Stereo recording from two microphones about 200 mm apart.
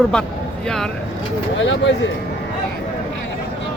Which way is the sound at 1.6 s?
70° left (ahead or behind).